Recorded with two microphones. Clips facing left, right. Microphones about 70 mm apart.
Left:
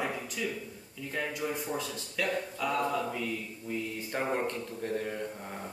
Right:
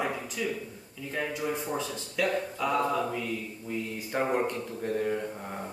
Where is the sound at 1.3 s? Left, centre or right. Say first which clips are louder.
Right 2 dB; right.